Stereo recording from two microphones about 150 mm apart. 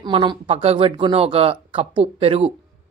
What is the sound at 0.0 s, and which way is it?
Speech, 30° right (ahead or behind).